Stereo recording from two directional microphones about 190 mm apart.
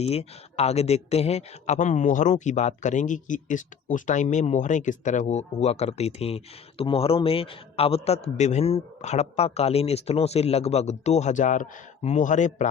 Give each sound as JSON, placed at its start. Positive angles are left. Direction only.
{"t": 0.0, "sound": "speech", "side_deg": 35}